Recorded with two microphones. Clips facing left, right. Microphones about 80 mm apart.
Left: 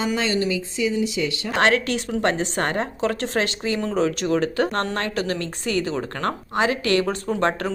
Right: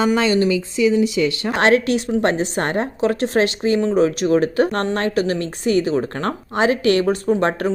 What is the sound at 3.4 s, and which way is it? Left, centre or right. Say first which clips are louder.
Speech: right 7 dB; right.